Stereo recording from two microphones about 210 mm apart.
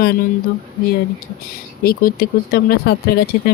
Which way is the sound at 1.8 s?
45° left (ahead or behind).